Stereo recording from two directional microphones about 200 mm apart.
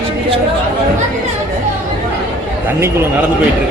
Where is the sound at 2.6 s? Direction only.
10° right (ahead or behind).